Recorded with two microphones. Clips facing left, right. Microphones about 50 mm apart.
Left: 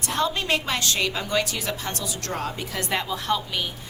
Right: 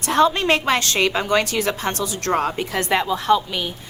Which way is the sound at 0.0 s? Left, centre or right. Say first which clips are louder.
Right 8 dB; right.